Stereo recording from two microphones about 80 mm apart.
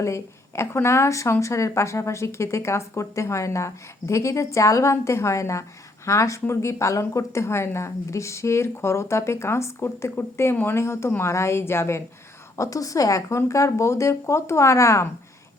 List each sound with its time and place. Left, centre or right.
0.0 s speech: left
12.5 s speech: left